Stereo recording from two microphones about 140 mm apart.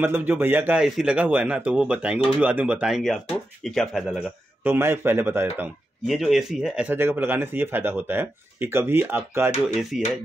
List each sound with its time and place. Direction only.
0.0 s speech: 15° right (ahead or behind); by 4.3 s centre (ahead or behind)
4.6 s speech: 15° right (ahead or behind)
6.0 s speech: centre (ahead or behind)
9.8 s speech: centre (ahead or behind)